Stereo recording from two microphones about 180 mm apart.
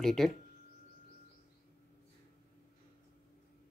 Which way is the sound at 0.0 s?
Centre (ahead or behind).